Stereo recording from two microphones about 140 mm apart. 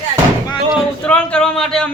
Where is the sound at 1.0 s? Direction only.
10° left (ahead or behind).